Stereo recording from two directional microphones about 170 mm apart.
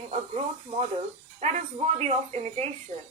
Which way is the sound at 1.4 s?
40° right (ahead or behind).